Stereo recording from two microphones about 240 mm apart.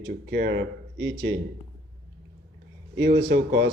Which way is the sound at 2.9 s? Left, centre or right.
Right.